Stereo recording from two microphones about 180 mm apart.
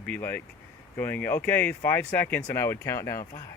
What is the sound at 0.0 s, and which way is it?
Speech, 10° left (ahead or behind).